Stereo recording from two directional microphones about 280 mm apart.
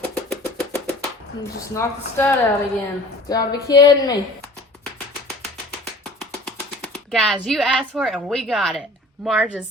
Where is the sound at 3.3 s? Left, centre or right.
Centre.